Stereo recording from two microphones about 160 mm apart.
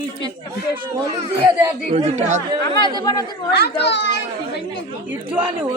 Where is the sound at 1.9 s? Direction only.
45° right (ahead or behind).